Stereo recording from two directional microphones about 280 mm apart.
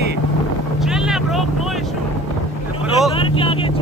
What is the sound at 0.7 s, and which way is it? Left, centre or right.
Vehicle, centre.